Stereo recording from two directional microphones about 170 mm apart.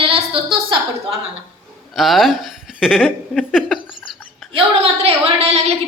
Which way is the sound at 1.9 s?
Centre (ahead or behind).